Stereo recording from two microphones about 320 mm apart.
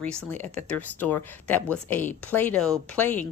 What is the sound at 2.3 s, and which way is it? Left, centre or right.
A woman's voice, centre.